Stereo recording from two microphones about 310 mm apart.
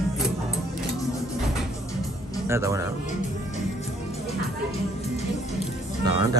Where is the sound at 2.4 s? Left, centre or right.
Centre.